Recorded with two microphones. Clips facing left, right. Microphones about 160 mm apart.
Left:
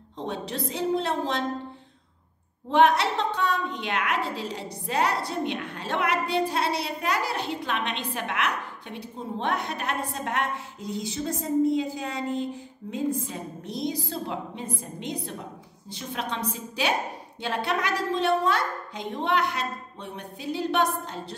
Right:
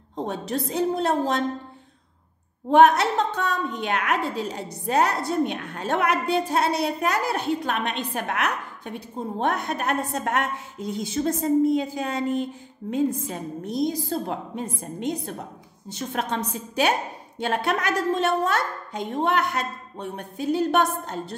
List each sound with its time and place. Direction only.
0.2 s a woman's voice: 45° right (ahead or behind)
2.7 s a woman's voice: 45° right (ahead or behind)